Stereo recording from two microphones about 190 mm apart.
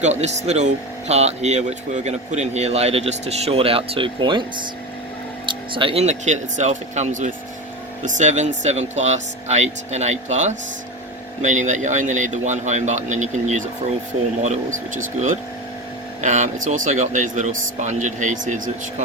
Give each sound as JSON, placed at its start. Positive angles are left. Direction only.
{"t": 0.0, "sound": "speech", "side_deg": -35}
{"t": 14.9, "sound": "speech", "side_deg": -40}